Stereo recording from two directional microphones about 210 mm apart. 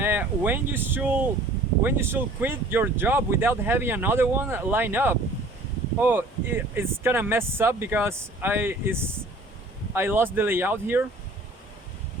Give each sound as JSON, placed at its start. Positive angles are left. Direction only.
{"t": 0.0, "sound": "speech", "side_deg": -10}